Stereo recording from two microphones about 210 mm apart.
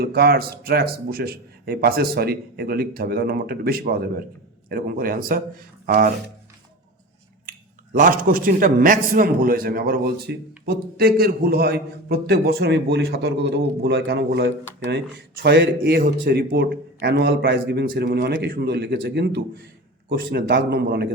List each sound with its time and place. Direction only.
0.0 s a man's voice: 50° right (ahead or behind)
7.9 s a man's voice: 40° right (ahead or behind)